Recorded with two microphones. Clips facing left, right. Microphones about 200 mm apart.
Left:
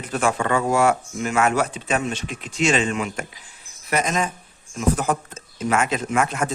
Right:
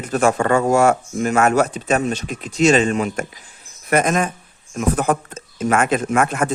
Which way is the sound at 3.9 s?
55° right (ahead or behind).